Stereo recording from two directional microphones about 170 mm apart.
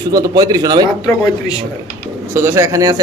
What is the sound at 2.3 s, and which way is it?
Speech, 15° right (ahead or behind).